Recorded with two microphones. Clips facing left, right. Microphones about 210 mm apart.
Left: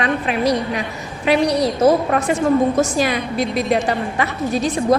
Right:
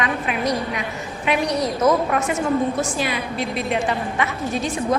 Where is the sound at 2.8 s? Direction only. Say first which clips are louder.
Left 6 dB; 40° left (ahead or behind).